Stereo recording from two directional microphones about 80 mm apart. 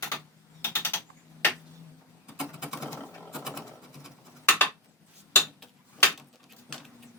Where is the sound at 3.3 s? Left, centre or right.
Centre.